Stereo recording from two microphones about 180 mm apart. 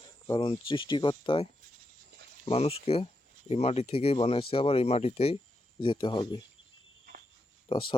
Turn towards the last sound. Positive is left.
turn(degrees=30)  # may be behind; listen again after turning